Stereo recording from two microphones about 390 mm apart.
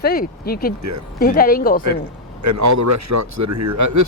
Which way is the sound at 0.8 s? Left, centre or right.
Right.